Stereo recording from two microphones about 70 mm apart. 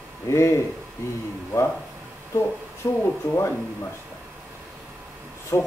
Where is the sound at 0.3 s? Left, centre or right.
Left.